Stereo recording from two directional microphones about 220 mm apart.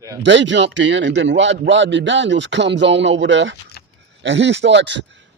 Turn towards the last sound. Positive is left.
turn(degrees=-55)  # may be behind; listen again after turning